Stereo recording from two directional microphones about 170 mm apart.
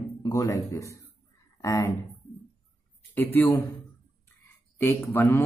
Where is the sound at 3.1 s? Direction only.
10° left (ahead or behind).